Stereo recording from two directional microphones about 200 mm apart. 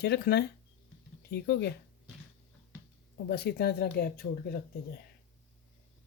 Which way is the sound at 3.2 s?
55° left (ahead or behind).